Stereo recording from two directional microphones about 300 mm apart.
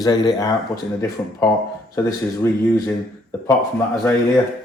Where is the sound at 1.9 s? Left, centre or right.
Centre.